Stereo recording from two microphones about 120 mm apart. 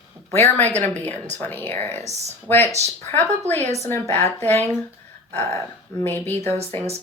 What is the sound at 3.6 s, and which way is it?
Speech, 65° right (ahead or behind).